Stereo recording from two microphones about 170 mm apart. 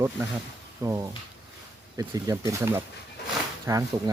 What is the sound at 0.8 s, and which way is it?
Speech, 15° right (ahead or behind).